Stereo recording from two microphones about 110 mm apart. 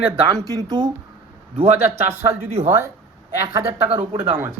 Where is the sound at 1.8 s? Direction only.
20° right (ahead or behind).